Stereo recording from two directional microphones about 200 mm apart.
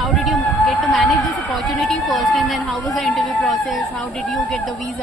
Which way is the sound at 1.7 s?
Centre (ahead or behind).